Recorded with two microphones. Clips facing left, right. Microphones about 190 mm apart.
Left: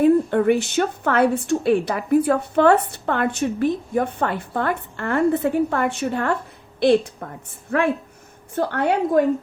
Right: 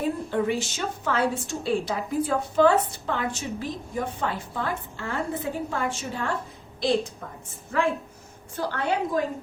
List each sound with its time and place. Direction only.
0.0 s a woman's voice: 60° left (ahead or behind)
7.7 s a woman's voice: 65° left (ahead or behind)